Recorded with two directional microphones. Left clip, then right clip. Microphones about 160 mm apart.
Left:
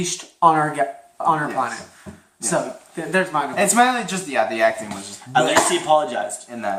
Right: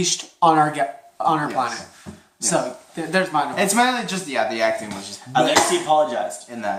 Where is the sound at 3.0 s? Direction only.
25° right (ahead or behind).